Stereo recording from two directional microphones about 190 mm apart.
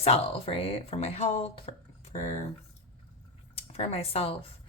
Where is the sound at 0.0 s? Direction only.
30° left (ahead or behind).